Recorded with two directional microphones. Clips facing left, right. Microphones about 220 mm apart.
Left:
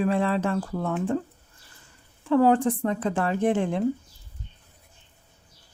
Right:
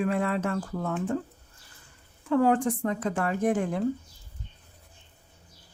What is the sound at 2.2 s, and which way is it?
A woman's voice, 30° left (ahead or behind).